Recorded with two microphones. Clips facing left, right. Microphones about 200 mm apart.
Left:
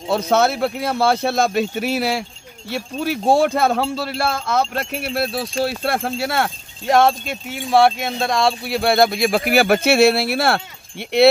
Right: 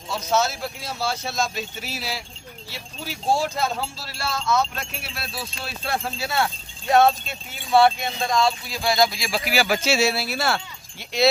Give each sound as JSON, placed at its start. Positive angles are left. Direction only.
{"t": 0.1, "sound": "speech", "side_deg": 60}
{"t": 6.9, "sound": "speech", "side_deg": 80}